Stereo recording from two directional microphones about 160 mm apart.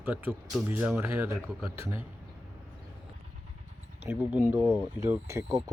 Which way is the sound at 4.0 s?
10° right (ahead or behind).